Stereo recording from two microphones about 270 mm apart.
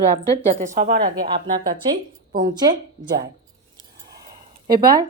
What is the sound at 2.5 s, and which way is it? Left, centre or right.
Speech, centre.